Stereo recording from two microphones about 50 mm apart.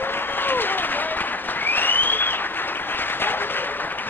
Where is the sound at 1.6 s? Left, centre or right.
Left.